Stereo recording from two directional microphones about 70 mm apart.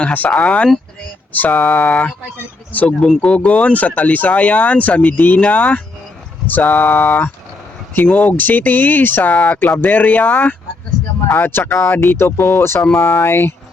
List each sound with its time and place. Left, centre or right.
0.0 s speech: left
0.3 s speech: centre
1.3 s a sound: left
1.5 s speech: centre; by 9.4 s left
9.4 s speech: centre; by 12.8 s left
12.8 s speech: centre
13.2 s speech: left